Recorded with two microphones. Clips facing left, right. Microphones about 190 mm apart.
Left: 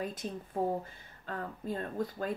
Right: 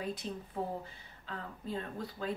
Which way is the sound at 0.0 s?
45° left (ahead or behind).